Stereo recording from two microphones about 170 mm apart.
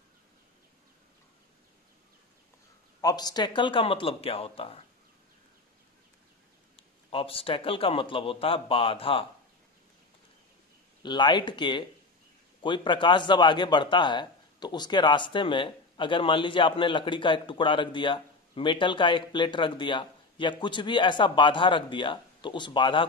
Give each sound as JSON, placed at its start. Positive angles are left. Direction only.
{"t": 3.0, "sound": "a man's voice", "side_deg": 20}
{"t": 6.8, "sound": "a man's voice", "side_deg": 30}
{"t": 11.0, "sound": "a man's voice", "side_deg": 25}